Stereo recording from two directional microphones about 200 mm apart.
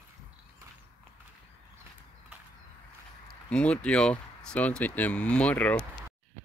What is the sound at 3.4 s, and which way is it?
Speech, 5° left (ahead or behind).